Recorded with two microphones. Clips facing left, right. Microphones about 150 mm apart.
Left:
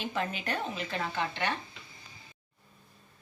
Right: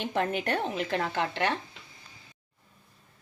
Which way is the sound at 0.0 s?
60° right (ahead or behind).